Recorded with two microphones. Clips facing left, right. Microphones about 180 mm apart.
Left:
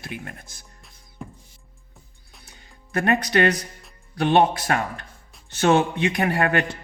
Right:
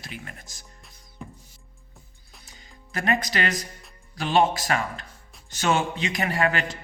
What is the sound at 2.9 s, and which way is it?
Speech, 60° left (ahead or behind).